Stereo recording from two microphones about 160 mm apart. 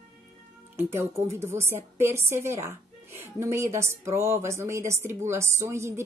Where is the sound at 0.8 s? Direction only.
15° right (ahead or behind).